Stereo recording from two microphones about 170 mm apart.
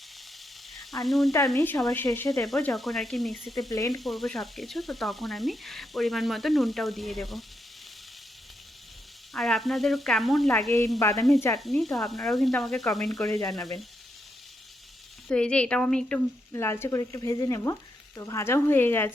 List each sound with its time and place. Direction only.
1.0 s speech: centre (ahead or behind)
1.5 s speech: 15° left (ahead or behind)
2.4 s speech: 5° left (ahead or behind)
3.7 s speech: 20° left (ahead or behind)
4.0 s speech: centre (ahead or behind)
9.3 s speech: centre (ahead or behind)
10.7 s speech: 15° left (ahead or behind)
11.6 s speech: centre (ahead or behind)
13.2 s speech: 20° left (ahead or behind)
15.3 s speech: 5° left (ahead or behind)